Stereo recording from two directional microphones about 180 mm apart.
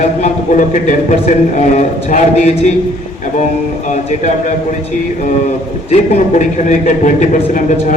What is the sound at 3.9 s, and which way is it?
Speech, 40° left (ahead or behind).